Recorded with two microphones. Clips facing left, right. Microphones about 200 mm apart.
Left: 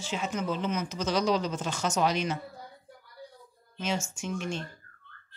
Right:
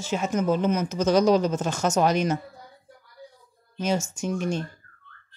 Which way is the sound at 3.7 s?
40° right (ahead or behind).